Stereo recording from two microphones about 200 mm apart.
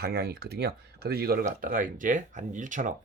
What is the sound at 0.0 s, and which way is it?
Speech, 50° right (ahead or behind).